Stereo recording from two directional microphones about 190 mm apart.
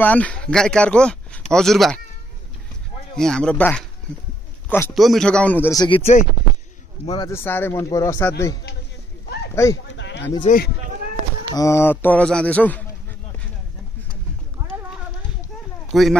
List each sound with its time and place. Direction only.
0.0 s speech: 10° left (ahead or behind)
3.2 s a man's voice: 5° left (ahead or behind)
4.9 s speech: centre (ahead or behind); by 6.1 s 30° left (ahead or behind)
7.1 s speech: 15° left (ahead or behind)
9.6 s speech: 15° left (ahead or behind)
9.9 s a sound: 70° left (ahead or behind)
10.4 s speech: 45° left (ahead or behind)
11.5 s speech: 15° left (ahead or behind)
14.6 s clip-clop: 15° right (ahead or behind)
15.9 s speech: centre (ahead or behind)